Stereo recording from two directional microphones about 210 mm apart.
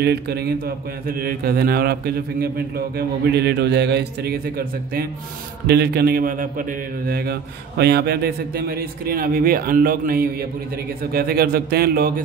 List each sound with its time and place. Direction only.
0.0 s a man's voice: 50° right (ahead or behind)